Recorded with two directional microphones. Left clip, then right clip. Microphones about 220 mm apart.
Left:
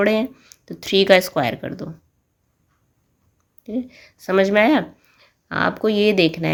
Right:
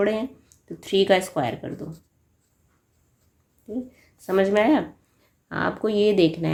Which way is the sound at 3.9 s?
30° left (ahead or behind).